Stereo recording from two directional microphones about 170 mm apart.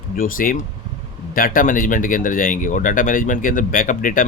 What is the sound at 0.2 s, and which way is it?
Speech, 55° left (ahead or behind).